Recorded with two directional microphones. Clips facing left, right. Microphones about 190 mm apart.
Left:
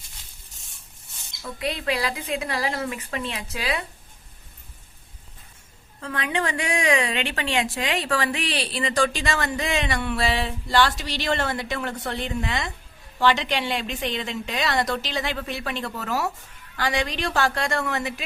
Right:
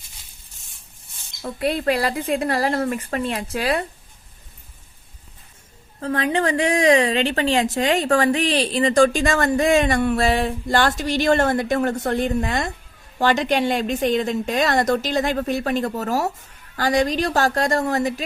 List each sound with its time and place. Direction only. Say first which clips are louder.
1.4 s a woman's voice: right 7 dB; 50° right (ahead or behind)
6.0 s a woman's voice: right 6 dB; 35° right (ahead or behind)